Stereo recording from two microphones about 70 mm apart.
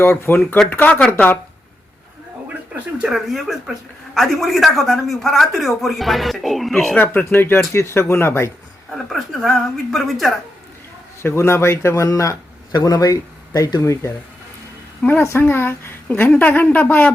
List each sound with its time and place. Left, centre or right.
0.0 s a man's voice: left
2.7 s a sound: centre
3.1 s speech: centre
7.0 s a man's voice: left
9.0 s speech: centre
11.2 s a man's voice: left
12.7 s speech: left
15.0 s a woman's voice: centre
15.4 s a man's voice: left